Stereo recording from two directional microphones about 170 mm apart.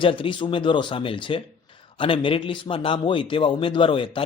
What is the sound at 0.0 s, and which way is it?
A man's voice, 30° left (ahead or behind).